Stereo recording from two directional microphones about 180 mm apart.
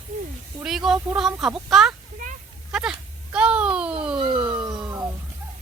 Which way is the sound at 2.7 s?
5° right (ahead or behind).